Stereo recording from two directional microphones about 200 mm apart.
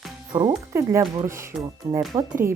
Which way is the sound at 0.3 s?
15° right (ahead or behind).